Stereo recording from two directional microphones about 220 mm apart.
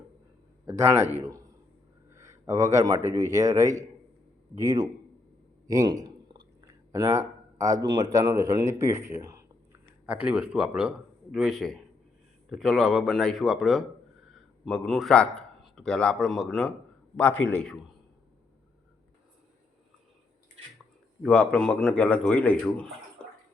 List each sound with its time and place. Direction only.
0.6 s a man's voice: 10° right (ahead or behind); by 17.7 s 5° left (ahead or behind)
21.2 s speech: 5° left (ahead or behind)